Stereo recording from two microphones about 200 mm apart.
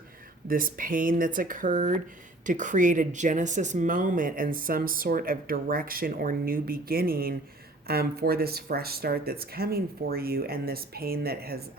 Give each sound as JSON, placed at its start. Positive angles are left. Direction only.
{"t": 0.4, "sound": "speech", "side_deg": -45}